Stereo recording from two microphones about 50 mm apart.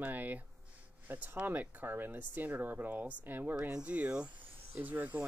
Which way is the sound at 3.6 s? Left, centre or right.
Right.